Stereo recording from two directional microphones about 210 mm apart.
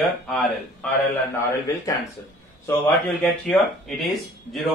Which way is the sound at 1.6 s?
15° left (ahead or behind).